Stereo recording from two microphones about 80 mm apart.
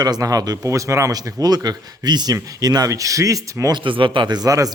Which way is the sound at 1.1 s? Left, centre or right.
Right.